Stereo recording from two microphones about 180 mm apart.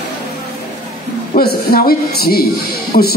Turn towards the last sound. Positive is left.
turn(degrees=50)  # may be behind; listen again after turning